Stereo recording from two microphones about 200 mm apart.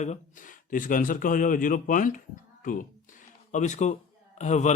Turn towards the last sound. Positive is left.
turn(degrees=35)  # may be behind; listen again after turning